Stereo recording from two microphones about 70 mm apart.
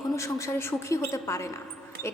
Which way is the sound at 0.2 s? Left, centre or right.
Left.